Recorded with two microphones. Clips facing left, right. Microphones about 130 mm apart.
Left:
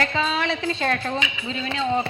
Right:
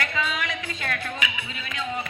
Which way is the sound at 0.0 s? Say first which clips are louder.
Left 5 dB; 30° left (ahead or behind).